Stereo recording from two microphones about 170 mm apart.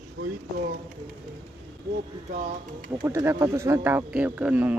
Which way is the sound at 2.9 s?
20° right (ahead or behind).